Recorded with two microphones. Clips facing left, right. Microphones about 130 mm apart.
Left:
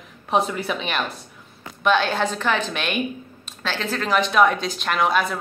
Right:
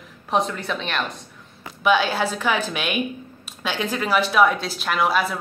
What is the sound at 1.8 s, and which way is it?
A woman's voice, 5° right (ahead or behind).